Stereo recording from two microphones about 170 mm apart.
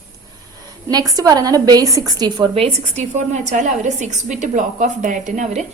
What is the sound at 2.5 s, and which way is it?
A woman's voice, 40° right (ahead or behind).